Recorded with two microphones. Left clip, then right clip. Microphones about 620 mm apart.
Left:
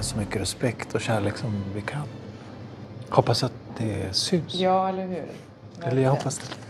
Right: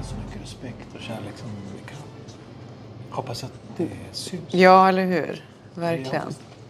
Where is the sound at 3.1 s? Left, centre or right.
Left.